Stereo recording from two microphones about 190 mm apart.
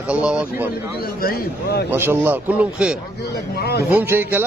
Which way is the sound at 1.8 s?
10° right (ahead or behind).